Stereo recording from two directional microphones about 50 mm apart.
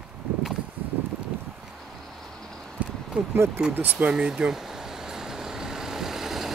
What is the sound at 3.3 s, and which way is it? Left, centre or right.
Speech, right.